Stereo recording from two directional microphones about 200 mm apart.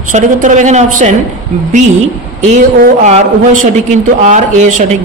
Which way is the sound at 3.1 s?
35° right (ahead or behind).